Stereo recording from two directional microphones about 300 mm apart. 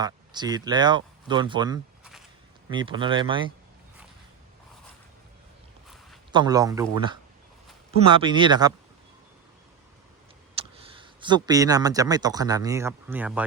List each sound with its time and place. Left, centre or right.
0.0 s speech: centre
6.3 s speech: centre
10.5 s speech: centre